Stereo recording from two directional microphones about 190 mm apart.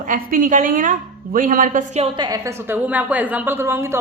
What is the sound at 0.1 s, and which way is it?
A woman's voice, 45° right (ahead or behind).